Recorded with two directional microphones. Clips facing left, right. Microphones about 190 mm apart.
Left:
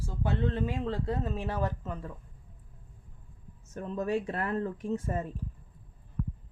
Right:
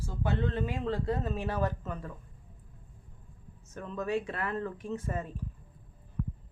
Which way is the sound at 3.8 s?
40° left (ahead or behind).